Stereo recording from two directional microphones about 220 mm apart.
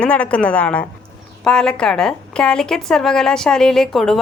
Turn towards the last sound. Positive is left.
turn(degrees=0)  # may be behind; listen again after turning